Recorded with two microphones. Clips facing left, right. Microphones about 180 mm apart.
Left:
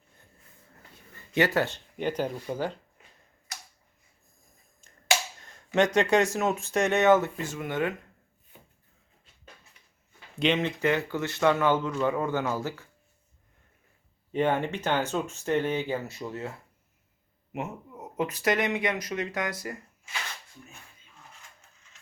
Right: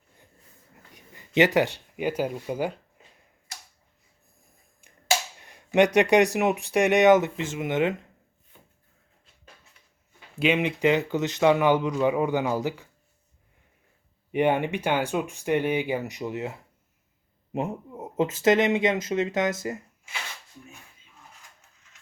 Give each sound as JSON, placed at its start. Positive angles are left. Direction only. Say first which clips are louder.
{"t": 0.9, "sound": "speech", "louder": "right 4 dB", "side_deg": -15}
{"t": 5.4, "sound": "speech", "louder": "right 5 dB", "side_deg": -15}
{"t": 8.5, "sound": "a sound", "louder": "left 2 dB", "side_deg": 10}
{"t": 10.4, "sound": "speech", "louder": "right 3 dB", "side_deg": -10}
{"t": 14.3, "sound": "speech", "louder": "right 3 dB", "side_deg": -15}
{"t": 17.5, "sound": "speech", "louder": "right 6 dB", "side_deg": -30}